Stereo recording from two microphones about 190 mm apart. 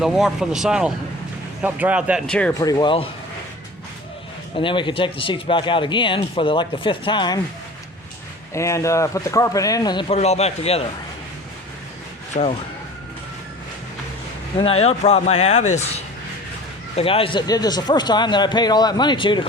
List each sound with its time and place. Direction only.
0.0 s speech: centre (ahead or behind)
2.6 s speech: 20° left (ahead or behind)
4.5 s speech: 25° left (ahead or behind)
8.5 s speech: 15° left (ahead or behind); by 10.8 s 30° left (ahead or behind)
12.4 s speech: 35° left (ahead or behind)
14.6 s speech: 30° left (ahead or behind)